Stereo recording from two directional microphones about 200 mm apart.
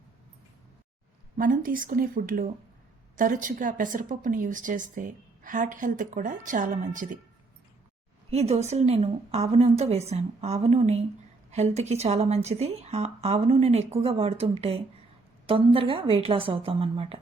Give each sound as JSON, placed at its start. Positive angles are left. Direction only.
{"t": 1.4, "sound": "a woman's voice", "side_deg": -45}
{"t": 8.3, "sound": "a woman's voice", "side_deg": -30}